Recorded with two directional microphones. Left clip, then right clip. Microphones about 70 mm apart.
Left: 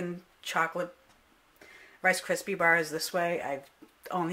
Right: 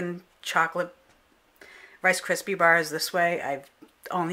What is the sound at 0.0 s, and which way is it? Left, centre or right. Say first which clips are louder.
Speech: right 4 dB; right.